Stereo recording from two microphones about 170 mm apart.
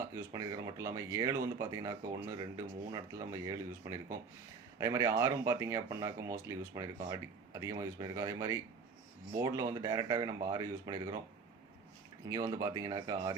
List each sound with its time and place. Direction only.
0.0 s speech: 15° right (ahead or behind)
12.3 s speech: 20° right (ahead or behind)